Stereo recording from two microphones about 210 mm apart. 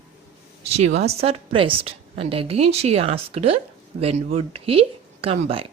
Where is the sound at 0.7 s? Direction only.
30° right (ahead or behind).